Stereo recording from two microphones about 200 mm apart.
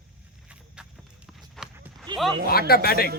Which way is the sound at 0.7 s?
5° right (ahead or behind).